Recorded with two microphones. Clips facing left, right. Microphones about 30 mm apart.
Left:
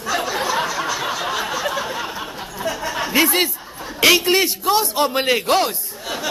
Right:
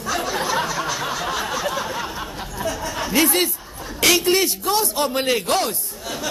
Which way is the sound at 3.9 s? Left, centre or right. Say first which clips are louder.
Left 3 dB; centre.